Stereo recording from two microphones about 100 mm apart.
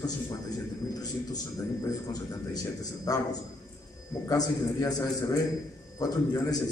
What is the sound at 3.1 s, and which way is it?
Speech, 40° left (ahead or behind).